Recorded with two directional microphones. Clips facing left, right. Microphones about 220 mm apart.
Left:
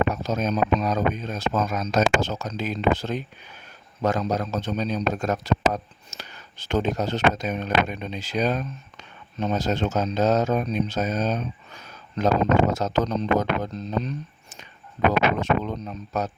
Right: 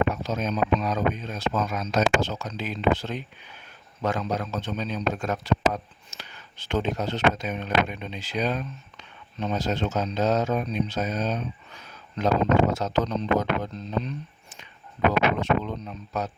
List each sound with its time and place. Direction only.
0.1 s a man's voice: 45° left (ahead or behind)